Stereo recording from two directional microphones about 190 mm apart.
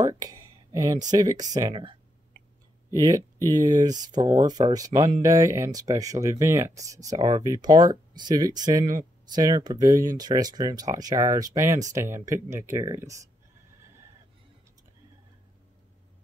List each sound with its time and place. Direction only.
0.0 s speech: 20° right (ahead or behind)